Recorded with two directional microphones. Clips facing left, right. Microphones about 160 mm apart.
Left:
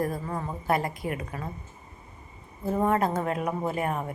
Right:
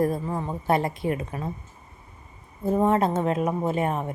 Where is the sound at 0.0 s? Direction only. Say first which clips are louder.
Right 5 dB; 25° right (ahead or behind).